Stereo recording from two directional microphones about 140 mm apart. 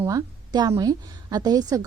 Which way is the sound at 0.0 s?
25° right (ahead or behind).